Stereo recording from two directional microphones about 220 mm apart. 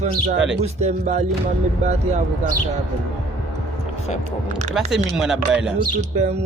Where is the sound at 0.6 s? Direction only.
30° right (ahead or behind).